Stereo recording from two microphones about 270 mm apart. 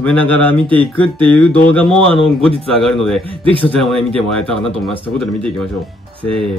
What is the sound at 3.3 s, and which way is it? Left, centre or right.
Speech, centre.